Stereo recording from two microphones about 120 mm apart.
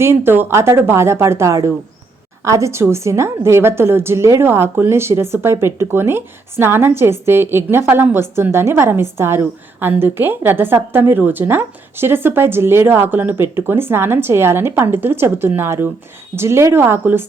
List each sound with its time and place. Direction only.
0.0 s a woman's voice: 20° right (ahead or behind)